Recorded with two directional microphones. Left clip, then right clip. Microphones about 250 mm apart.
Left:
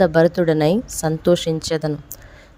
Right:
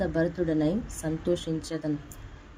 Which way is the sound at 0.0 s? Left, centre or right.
Left.